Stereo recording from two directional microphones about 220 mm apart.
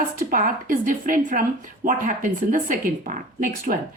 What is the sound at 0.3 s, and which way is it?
A woman's voice, 40° right (ahead or behind).